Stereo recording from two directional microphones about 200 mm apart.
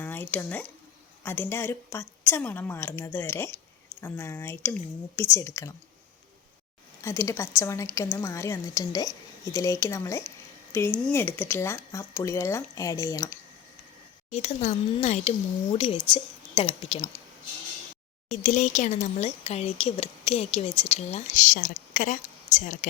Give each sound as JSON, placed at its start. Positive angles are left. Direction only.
{"t": 0.0, "sound": "a woman's voice", "side_deg": 10}
{"t": 7.0, "sound": "a woman's voice", "side_deg": 15}
{"t": 14.3, "sound": "speech", "side_deg": 35}
{"t": 18.4, "sound": "speech", "side_deg": 35}